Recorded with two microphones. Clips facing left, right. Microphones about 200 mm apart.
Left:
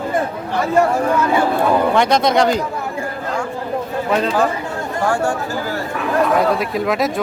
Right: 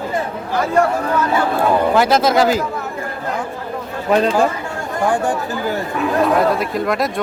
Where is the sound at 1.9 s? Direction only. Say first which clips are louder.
Right 1 dB; 5° right (ahead or behind).